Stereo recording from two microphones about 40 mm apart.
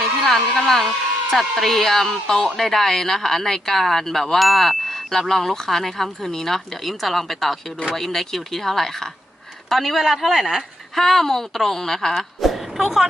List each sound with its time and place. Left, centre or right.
0.0 s speech: centre
12.4 s a woman's voice: centre